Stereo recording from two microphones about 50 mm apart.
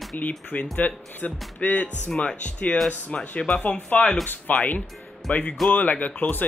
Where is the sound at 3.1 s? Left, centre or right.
Left.